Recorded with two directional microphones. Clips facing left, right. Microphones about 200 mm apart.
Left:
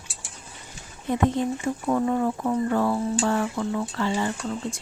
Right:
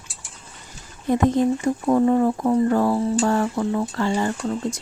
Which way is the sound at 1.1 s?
40° right (ahead or behind).